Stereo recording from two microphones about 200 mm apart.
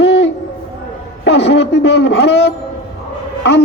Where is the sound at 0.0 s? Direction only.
60° left (ahead or behind).